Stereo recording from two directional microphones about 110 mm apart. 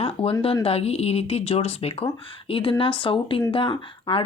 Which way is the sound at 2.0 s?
55° left (ahead or behind).